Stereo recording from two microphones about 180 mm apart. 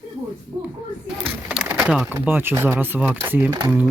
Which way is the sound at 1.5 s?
10° right (ahead or behind).